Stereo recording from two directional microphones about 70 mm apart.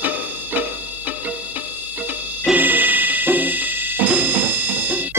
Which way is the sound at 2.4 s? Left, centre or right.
Right.